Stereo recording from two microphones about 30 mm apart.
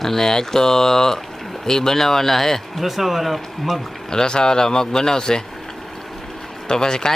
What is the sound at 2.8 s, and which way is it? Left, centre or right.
Speech, centre.